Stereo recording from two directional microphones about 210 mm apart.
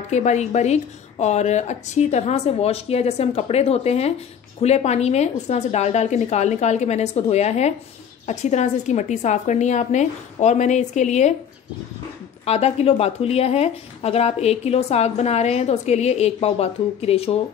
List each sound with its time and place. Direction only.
0.1 s speech: 35° left (ahead or behind)
12.4 s speech: 30° left (ahead or behind)